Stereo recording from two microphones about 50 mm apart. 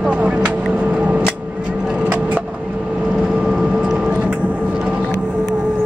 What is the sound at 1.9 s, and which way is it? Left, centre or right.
Vehicle, right.